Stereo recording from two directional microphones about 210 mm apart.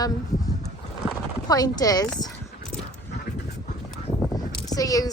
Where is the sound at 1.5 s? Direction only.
15° left (ahead or behind).